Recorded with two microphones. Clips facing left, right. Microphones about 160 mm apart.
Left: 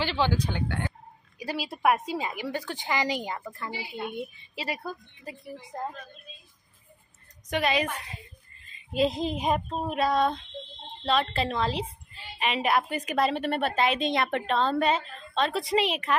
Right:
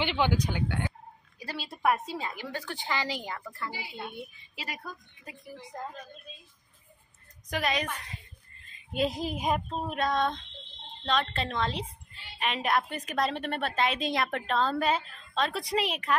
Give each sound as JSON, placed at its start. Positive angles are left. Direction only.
{"t": 0.0, "sound": "speech", "side_deg": -20}
{"t": 1.4, "sound": "a woman's voice", "side_deg": 15}
{"t": 4.6, "sound": "a woman's voice", "side_deg": 30}
{"t": 7.4, "sound": "a woman's voice", "side_deg": 0}
{"t": 8.5, "sound": "a sound", "side_deg": 0}
{"t": 9.2, "sound": "a woman's voice", "side_deg": -5}